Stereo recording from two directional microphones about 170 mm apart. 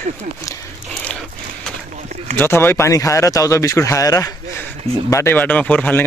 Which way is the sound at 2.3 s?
15° left (ahead or behind).